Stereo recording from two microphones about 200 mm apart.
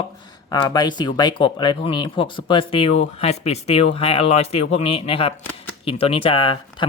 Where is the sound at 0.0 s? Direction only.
20° left (ahead or behind).